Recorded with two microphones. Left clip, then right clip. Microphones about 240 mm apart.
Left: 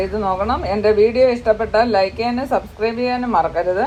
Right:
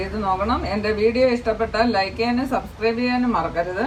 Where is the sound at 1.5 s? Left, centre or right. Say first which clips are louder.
Left 5 dB; left.